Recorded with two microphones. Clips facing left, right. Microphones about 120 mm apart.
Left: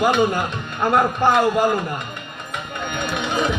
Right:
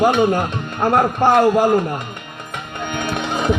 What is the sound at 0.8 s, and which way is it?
Speech, 35° right (ahead or behind).